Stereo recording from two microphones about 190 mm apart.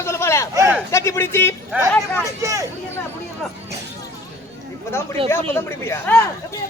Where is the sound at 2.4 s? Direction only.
15° right (ahead or behind).